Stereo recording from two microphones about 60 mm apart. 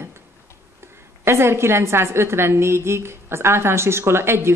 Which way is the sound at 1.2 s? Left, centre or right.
Right.